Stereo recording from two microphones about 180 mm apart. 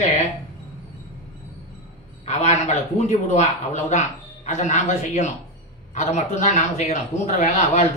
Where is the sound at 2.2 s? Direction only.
40° left (ahead or behind).